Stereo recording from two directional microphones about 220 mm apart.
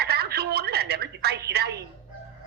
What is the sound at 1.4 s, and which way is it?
Speech, 50° right (ahead or behind).